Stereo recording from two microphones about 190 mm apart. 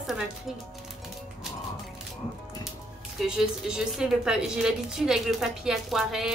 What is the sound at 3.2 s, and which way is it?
A woman's voice, 5° right (ahead or behind).